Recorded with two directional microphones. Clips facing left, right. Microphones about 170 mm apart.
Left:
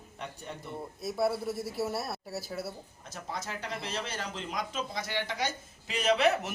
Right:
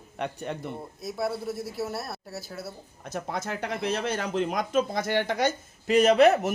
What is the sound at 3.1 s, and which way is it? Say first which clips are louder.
Speech: right 7 dB; 55° right (ahead or behind).